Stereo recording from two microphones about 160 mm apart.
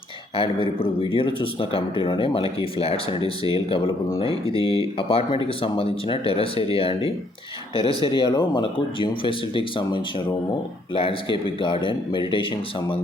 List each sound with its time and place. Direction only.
0.3 s speech: 35° left (ahead or behind)